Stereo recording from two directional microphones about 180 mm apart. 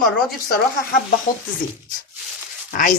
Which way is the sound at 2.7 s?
50° left (ahead or behind).